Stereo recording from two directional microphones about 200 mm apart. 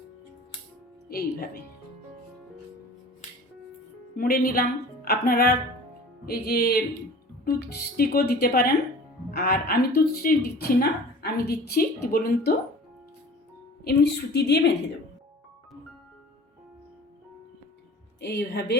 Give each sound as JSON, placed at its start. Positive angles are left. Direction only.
{"t": 1.0, "sound": "speech", "side_deg": 50}
{"t": 4.2, "sound": "a woman's voice", "side_deg": 45}
{"t": 13.8, "sound": "a woman's voice", "side_deg": 55}
{"t": 18.2, "sound": "a woman's voice", "side_deg": 60}